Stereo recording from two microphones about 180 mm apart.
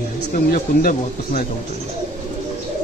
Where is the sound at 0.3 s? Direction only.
55° left (ahead or behind).